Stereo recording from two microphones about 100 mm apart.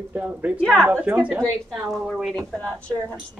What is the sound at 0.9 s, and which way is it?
Speech, 20° right (ahead or behind).